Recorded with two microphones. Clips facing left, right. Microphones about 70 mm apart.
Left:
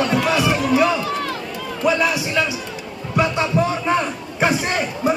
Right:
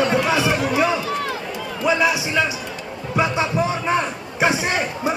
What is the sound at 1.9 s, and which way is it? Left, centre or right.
Speech, centre.